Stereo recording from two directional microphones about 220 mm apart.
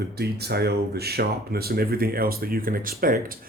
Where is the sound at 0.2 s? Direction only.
45° right (ahead or behind).